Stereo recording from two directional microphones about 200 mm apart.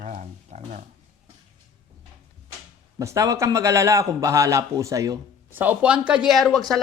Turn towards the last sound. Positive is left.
turn(degrees=0)  # may be behind; listen again after turning